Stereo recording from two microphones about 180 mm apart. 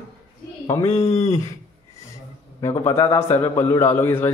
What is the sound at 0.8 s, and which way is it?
Speech, 35° left (ahead or behind).